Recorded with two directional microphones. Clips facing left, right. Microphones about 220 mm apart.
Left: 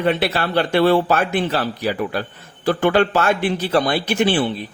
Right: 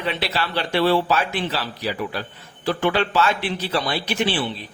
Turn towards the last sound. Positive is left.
turn(degrees=50)  # may be behind; listen again after turning